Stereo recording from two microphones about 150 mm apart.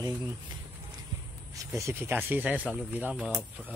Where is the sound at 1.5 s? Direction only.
20° right (ahead or behind).